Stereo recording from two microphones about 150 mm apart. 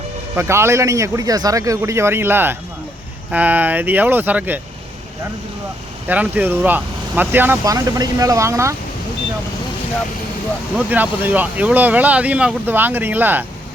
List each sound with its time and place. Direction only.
0.3 s a man's voice: 15° right (ahead or behind)
6.1 s a man's voice: 10° right (ahead or behind)
10.8 s speech: 10° right (ahead or behind)